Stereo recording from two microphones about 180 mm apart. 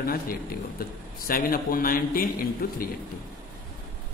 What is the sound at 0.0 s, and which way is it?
A man's voice, 55° left (ahead or behind).